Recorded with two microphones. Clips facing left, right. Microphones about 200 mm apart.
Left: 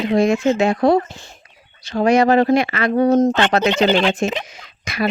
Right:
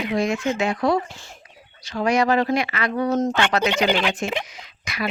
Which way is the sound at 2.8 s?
45° left (ahead or behind).